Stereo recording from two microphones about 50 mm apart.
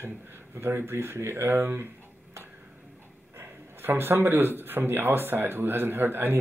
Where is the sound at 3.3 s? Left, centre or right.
Right.